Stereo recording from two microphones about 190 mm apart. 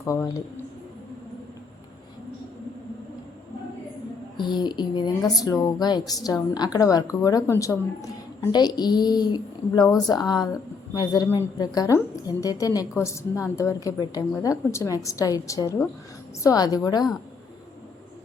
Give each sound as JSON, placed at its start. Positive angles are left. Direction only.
{"t": 0.0, "sound": "a woman's voice", "side_deg": 15}
{"t": 4.4, "sound": "a woman's voice", "side_deg": 25}